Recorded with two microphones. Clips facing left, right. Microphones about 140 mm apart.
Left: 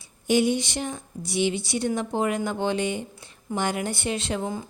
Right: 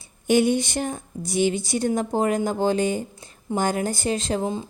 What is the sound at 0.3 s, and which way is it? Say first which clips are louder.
A woman's voice: right 3 dB; 55° right (ahead or behind).